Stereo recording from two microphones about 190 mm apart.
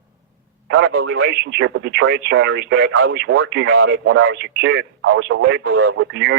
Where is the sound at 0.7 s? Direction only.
60° right (ahead or behind).